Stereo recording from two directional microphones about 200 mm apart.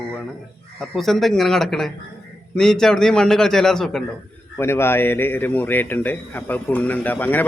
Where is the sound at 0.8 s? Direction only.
Centre (ahead or behind).